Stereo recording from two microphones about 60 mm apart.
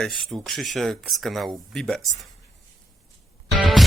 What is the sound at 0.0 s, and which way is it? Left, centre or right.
Speech, centre.